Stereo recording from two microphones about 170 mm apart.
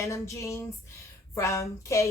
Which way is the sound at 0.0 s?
15° left (ahead or behind).